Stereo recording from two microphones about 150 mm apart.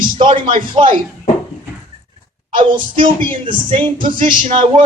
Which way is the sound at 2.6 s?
35° right (ahead or behind).